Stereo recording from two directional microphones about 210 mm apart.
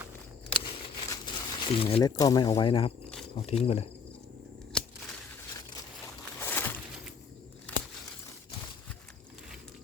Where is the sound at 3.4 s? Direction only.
30° left (ahead or behind).